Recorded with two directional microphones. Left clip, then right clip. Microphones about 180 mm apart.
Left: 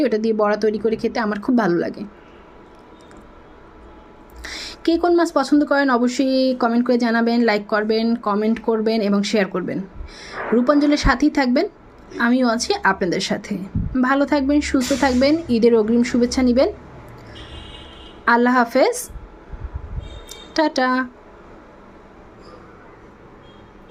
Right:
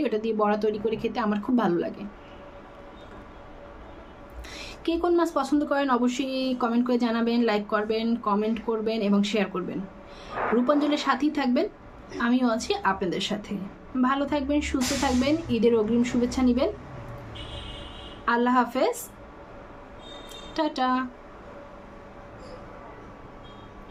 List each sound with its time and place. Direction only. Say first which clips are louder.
0.0 s speech: left 7 dB; 35° left (ahead or behind)
4.4 s speech: left 9 dB; 40° left (ahead or behind)
18.3 s speech: left 7 dB; 40° left (ahead or behind)
20.5 s speech: left 7 dB; 40° left (ahead or behind)